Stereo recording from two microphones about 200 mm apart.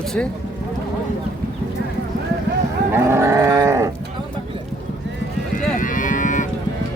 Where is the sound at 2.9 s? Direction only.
15° right (ahead or behind).